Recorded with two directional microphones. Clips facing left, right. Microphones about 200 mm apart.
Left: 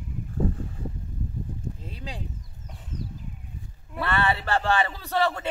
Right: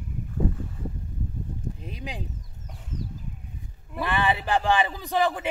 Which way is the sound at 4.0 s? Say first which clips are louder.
Even; 15° right (ahead or behind).